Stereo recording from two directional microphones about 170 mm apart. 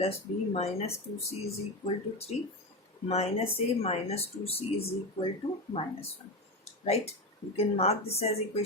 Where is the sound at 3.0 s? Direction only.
35° left (ahead or behind).